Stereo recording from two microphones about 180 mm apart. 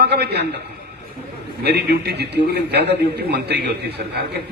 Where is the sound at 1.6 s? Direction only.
65° right (ahead or behind).